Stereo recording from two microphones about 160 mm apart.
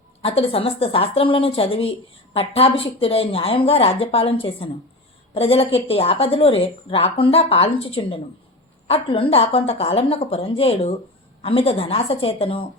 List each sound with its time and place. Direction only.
0.2 s a woman's voice: 35° left (ahead or behind)